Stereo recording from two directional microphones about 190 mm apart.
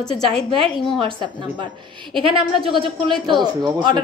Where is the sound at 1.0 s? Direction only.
25° right (ahead or behind).